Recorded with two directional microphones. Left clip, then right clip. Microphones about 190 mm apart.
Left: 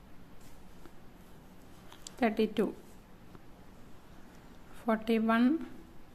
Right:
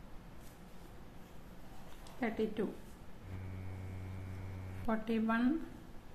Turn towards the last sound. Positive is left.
turn(degrees=40)  # may be behind; listen again after turning